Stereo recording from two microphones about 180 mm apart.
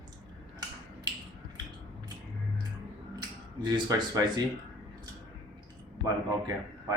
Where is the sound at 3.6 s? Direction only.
25° right (ahead or behind).